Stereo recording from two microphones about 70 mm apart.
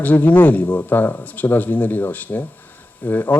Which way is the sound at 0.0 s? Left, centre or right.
Left.